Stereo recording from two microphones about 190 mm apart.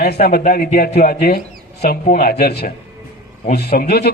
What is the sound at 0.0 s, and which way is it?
A man's voice, 55° left (ahead or behind).